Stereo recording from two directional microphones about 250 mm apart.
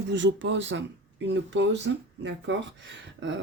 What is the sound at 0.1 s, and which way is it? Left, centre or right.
Speech, right.